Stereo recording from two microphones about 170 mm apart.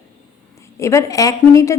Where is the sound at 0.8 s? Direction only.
15° left (ahead or behind).